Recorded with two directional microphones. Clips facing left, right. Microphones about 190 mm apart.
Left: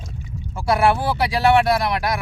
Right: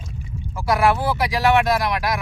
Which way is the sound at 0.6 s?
30° left (ahead or behind).